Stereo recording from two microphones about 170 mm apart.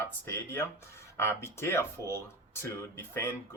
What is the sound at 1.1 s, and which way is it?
Speech, 15° left (ahead or behind).